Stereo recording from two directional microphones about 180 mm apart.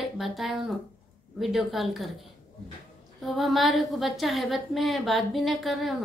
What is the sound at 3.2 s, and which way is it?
A woman's voice, centre (ahead or behind).